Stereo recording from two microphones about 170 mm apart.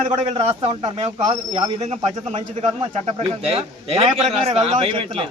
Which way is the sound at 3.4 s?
35° right (ahead or behind).